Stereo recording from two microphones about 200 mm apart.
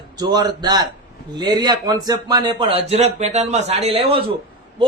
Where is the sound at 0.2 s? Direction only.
20° right (ahead or behind).